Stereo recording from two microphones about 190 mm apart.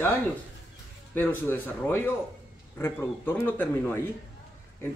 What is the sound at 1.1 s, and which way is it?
Speech, 10° left (ahead or behind).